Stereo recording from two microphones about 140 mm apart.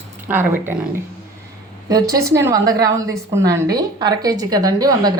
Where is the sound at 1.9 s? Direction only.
25° right (ahead or behind).